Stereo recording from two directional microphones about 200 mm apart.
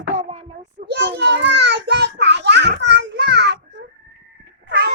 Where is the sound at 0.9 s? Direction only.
55° right (ahead or behind).